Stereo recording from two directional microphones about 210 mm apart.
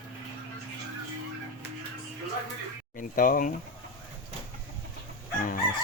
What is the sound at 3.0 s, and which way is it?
Speech, 40° left (ahead or behind).